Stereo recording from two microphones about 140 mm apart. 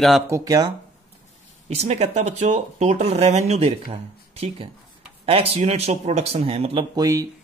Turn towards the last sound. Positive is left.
turn(degrees=-25)  # may be behind; listen again after turning